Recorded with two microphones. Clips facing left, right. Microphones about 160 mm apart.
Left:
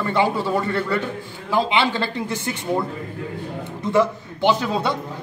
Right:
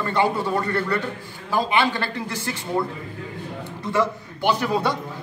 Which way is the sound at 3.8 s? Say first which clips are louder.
Left 4 dB; 20° left (ahead or behind).